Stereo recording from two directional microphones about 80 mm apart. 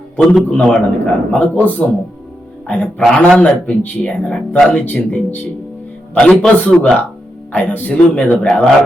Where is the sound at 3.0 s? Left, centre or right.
Centre.